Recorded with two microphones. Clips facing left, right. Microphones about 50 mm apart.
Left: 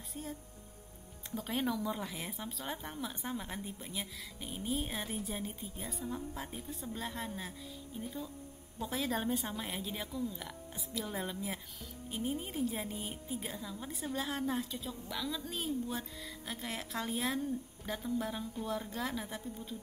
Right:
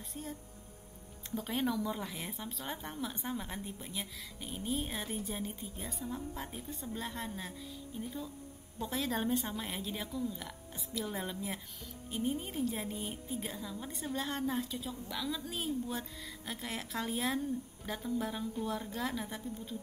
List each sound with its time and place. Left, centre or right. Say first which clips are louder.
0.1 s a woman's voice: left 1 dB; centre